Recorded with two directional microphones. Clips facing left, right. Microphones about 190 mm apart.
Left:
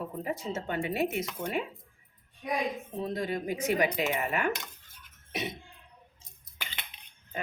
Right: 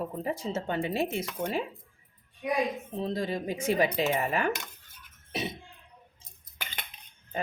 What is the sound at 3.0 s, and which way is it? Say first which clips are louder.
Speech: right 1 dB; 30° right (ahead or behind).